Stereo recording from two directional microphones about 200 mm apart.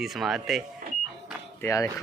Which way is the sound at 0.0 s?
Centre (ahead or behind).